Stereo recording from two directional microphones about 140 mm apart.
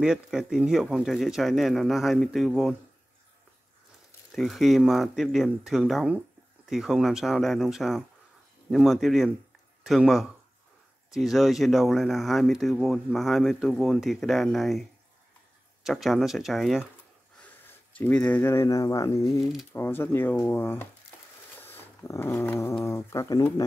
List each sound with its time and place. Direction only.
0.0 s speech: 5° right (ahead or behind)
4.3 s speech: centre (ahead or behind)
17.4 s speech: 10° left (ahead or behind)
21.5 s dog: 15° left (ahead or behind)
22.8 s speech: 20° left (ahead or behind)